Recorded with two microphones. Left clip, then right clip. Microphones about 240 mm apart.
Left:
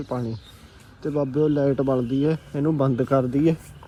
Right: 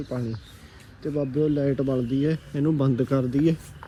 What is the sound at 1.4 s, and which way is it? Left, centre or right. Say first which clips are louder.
Speech: left 3 dB; left.